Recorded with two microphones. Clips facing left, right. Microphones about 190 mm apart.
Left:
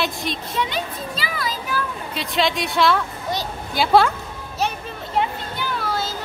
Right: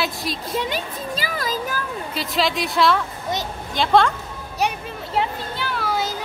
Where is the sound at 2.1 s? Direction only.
Centre (ahead or behind).